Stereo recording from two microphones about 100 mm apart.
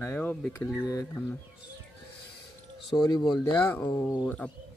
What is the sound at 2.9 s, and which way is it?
Speech, 45° left (ahead or behind).